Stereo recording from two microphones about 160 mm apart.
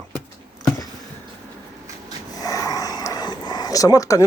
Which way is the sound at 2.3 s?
20° left (ahead or behind).